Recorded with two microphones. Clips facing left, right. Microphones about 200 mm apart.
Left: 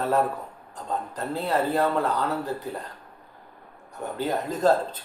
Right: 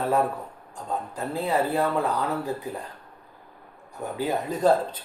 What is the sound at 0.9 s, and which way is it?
Speech, 10° right (ahead or behind).